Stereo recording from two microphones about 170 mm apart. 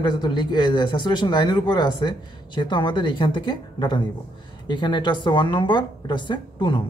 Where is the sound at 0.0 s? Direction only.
25° left (ahead or behind).